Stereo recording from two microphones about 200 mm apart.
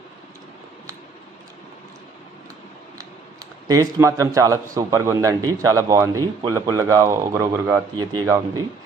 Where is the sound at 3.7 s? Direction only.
15° right (ahead or behind).